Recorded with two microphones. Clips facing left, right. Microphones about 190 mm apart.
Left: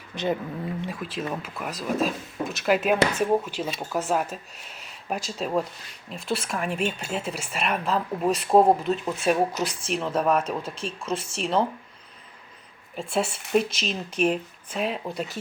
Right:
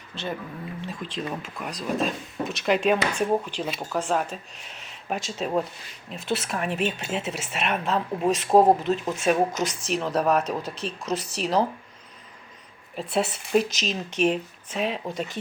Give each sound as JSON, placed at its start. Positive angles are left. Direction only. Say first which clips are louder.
{"t": 0.1, "sound": "speech", "louder": "left 5 dB", "side_deg": 15}
{"t": 13.0, "sound": "speech", "louder": "right 1 dB", "side_deg": 0}